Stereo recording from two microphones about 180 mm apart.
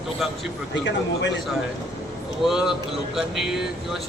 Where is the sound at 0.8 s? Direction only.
80° left.